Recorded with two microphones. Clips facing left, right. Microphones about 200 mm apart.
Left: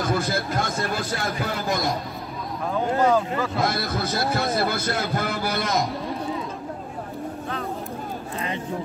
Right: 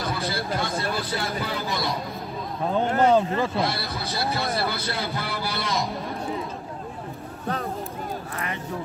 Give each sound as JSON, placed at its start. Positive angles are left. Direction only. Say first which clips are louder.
{"t": 0.0, "sound": "a sound", "louder": "left 4 dB", "side_deg": 45}
{"t": 3.0, "sound": "speech", "louder": "right 1 dB", "side_deg": -25}
{"t": 3.5, "sound": "speech", "louder": "left 2 dB", "side_deg": 45}